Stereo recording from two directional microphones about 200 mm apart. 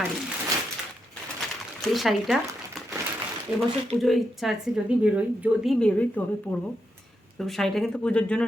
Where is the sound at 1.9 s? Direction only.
Centre (ahead or behind).